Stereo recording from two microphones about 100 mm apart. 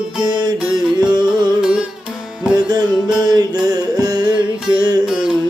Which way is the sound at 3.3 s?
40° right (ahead or behind).